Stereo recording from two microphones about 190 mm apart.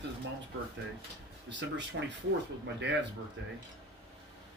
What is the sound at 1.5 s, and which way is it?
Speech, 70° right (ahead or behind).